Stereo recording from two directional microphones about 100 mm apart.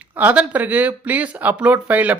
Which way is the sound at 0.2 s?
15° right (ahead or behind).